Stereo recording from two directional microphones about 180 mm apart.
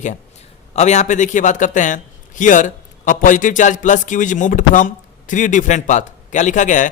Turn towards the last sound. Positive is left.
turn(degrees=45)  # may be behind; listen again after turning